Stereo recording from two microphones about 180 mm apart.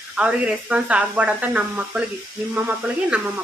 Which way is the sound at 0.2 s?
5° right (ahead or behind).